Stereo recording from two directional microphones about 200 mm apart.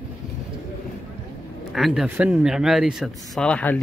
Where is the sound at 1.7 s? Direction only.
Centre (ahead or behind).